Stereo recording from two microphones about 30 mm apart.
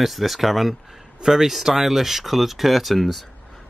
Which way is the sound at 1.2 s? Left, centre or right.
Centre.